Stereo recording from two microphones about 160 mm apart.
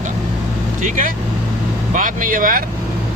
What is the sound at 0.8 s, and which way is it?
Speech, 55° right (ahead or behind).